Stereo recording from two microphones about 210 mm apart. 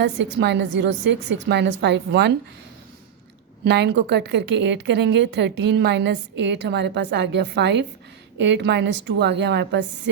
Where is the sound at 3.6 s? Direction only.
55° right (ahead or behind).